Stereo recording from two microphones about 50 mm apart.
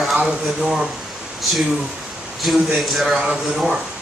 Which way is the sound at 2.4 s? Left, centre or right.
Centre.